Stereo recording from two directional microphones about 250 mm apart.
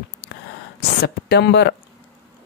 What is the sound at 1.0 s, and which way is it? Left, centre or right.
Speech, left.